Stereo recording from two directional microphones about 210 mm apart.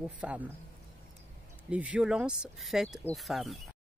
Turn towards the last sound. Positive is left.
turn(degrees=0)  # may be behind; listen again after turning